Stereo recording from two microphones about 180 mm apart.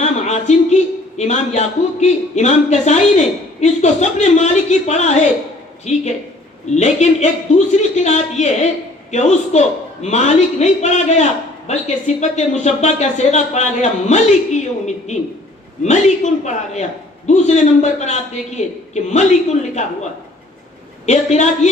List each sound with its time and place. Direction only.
0.0 s a man's voice: 40° left (ahead or behind)
21.1 s a man's voice: 40° left (ahead or behind)